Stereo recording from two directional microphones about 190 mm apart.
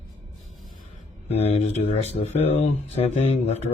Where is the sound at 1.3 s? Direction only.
35° left (ahead or behind).